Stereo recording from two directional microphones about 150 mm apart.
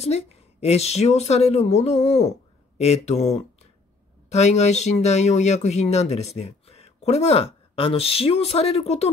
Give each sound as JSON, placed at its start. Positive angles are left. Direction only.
{"t": 0.0, "sound": "speech", "side_deg": 45}